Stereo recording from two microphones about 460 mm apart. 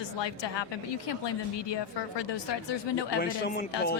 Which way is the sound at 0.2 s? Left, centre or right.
Left.